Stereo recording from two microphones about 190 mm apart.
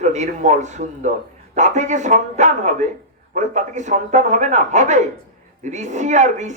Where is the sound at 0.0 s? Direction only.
40° right (ahead or behind).